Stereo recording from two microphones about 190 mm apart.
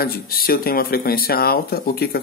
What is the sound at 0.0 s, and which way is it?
Speech, 50° left (ahead or behind).